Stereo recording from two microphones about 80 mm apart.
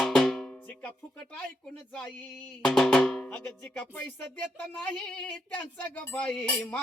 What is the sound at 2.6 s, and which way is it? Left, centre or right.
Drum, centre.